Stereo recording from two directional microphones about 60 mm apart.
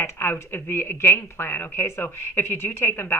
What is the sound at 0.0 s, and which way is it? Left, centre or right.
Speech, left.